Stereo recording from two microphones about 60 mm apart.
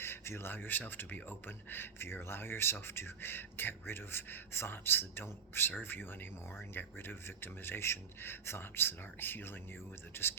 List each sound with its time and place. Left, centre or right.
0.0 s speech: left